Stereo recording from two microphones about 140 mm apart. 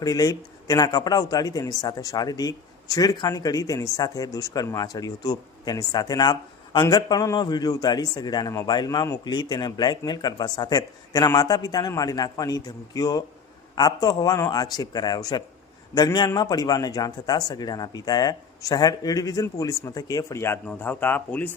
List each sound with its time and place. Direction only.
0.0 s a man's voice: 25° left (ahead or behind)